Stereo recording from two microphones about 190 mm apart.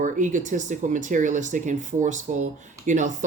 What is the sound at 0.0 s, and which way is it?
Speech, 40° right (ahead or behind).